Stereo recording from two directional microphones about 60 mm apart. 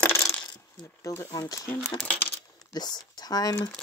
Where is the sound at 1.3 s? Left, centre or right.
Left.